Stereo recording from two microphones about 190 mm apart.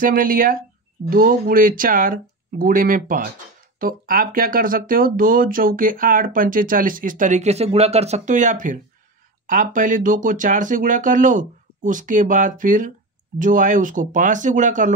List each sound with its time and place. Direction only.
0.0 s speech: 50° right (ahead or behind)